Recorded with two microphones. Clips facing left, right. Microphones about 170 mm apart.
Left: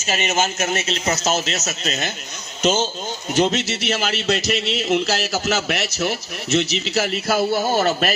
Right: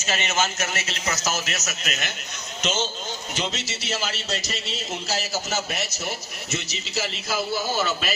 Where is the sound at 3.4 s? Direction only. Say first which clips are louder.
Left 13 dB; 60° left (ahead or behind).